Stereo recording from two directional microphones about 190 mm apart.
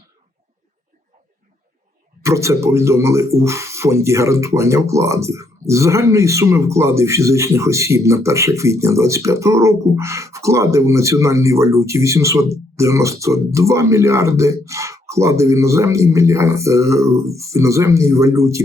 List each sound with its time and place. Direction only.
2.2 s speech: 15° right (ahead or behind)